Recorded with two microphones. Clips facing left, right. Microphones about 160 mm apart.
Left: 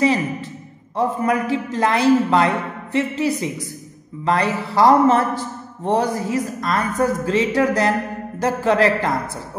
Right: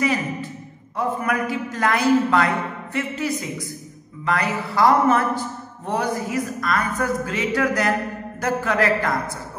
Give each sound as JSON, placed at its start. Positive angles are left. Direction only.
{"t": 0.9, "sound": "a man's voice", "side_deg": 30}